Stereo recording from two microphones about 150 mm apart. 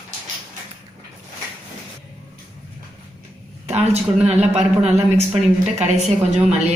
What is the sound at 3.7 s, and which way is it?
Speech, 45° right (ahead or behind).